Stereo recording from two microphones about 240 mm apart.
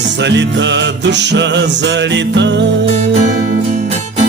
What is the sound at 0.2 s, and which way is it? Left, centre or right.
Music, right.